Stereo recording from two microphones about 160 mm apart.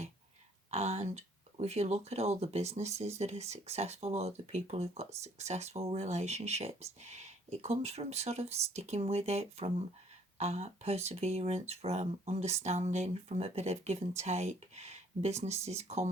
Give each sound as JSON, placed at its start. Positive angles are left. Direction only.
{"t": 0.7, "sound": "speech", "side_deg": -40}